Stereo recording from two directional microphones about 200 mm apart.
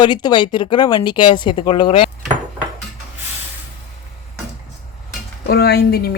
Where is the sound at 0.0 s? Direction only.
20° left (ahead or behind).